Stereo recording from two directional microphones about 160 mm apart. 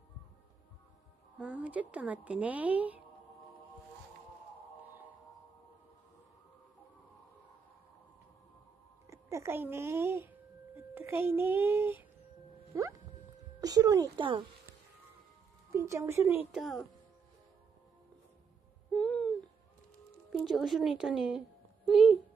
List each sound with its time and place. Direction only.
1.4 s a woman's voice: 10° right (ahead or behind)
9.1 s a woman's voice: 20° right (ahead or behind)
15.7 s a woman's voice: 15° right (ahead or behind)
18.9 s a sound: 5° left (ahead or behind)
20.2 s a woman's voice: centre (ahead or behind)